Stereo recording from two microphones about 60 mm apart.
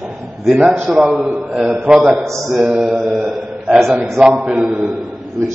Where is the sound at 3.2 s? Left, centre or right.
Centre.